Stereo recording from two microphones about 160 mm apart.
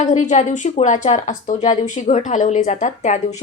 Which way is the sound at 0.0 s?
50° left (ahead or behind).